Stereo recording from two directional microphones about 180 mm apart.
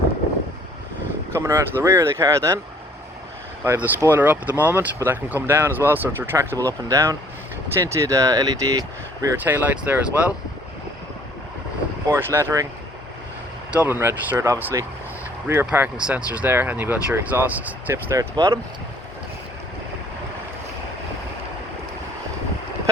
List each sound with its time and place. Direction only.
1.3 s speech: 15° right (ahead or behind)
3.6 s speech: 10° right (ahead or behind)
12.1 s speech: 15° right (ahead or behind)
13.7 s speech: 10° right (ahead or behind)